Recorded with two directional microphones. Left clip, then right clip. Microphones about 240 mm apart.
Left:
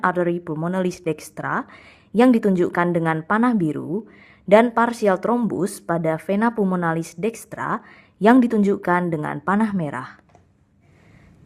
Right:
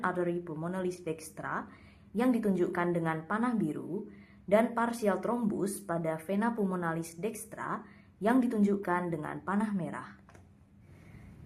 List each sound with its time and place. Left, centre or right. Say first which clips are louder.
0.0 s speech: left 12 dB; left